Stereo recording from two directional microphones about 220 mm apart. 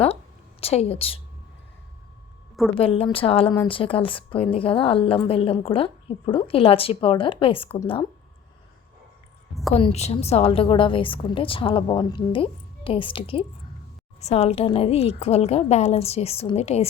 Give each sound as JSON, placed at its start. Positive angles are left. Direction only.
{"t": 0.6, "sound": "a woman's voice", "side_deg": 25}
{"t": 2.7, "sound": "a woman's voice", "side_deg": 25}
{"t": 9.7, "sound": "a woman's voice", "side_deg": 30}